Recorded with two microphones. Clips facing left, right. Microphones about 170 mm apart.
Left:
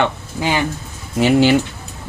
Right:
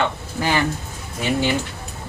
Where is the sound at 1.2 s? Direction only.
85° left.